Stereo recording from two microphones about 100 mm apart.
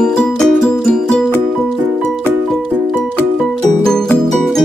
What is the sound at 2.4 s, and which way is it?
Music, centre (ahead or behind).